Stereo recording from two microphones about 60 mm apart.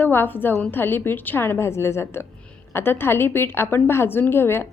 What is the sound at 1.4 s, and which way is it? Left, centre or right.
A woman's voice, left.